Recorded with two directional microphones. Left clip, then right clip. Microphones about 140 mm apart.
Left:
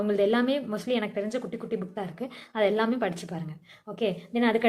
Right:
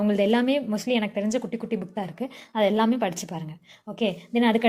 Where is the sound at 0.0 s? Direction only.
50° right (ahead or behind).